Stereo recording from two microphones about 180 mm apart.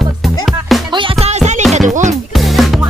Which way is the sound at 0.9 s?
30° right (ahead or behind).